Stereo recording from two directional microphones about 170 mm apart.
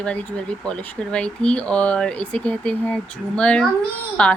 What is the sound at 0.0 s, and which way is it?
Speech, 5° left (ahead or behind).